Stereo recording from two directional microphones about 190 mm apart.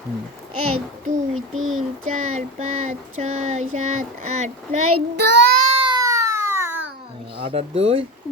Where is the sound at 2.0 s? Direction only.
40° right (ahead or behind).